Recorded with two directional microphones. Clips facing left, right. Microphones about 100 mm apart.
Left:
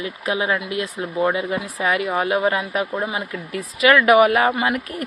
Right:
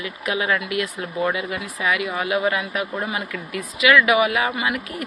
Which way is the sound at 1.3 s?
35° left (ahead or behind).